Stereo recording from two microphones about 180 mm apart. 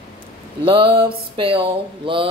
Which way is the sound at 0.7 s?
30° right (ahead or behind).